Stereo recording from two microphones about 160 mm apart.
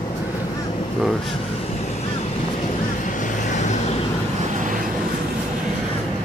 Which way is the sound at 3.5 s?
50° left (ahead or behind).